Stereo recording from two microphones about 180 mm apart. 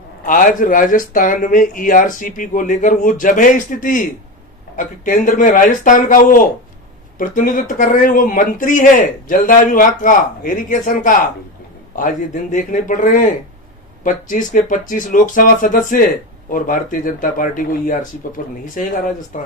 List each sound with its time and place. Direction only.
0.3 s speech: 50° left (ahead or behind)